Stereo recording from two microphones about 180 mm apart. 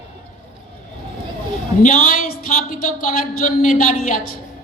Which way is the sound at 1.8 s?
45° left (ahead or behind).